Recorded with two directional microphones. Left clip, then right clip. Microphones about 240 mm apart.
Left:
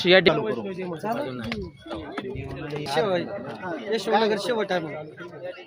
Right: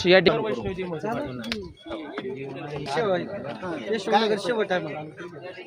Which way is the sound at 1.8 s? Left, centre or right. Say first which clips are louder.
Even; left.